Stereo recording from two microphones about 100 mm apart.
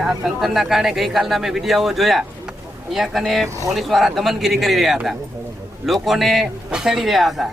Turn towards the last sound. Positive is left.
turn(degrees=0)  # may be behind; listen again after turning